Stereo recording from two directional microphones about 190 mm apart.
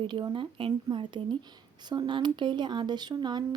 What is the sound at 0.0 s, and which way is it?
A woman's voice, 25° right (ahead or behind).